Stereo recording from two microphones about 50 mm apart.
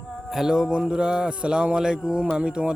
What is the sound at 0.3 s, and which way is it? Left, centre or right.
A man's voice, centre.